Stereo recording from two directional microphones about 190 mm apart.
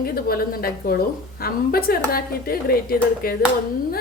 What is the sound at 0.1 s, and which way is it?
A woman's voice, 50° left (ahead or behind).